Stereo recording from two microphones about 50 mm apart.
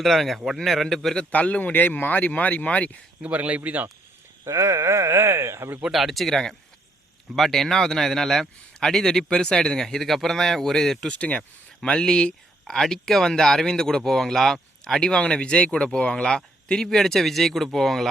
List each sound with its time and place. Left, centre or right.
0.0 s a man's voice: centre
1.3 s speech: left
3.2 s speech: right
4.4 s speech: right
5.9 s a man's voice: centre
11.1 s speech: left; by 15.0 s centre
15.0 s speech: centre